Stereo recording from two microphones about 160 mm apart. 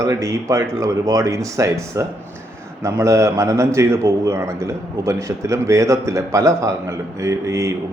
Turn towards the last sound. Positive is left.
turn(degrees=-20)  # may be behind; listen again after turning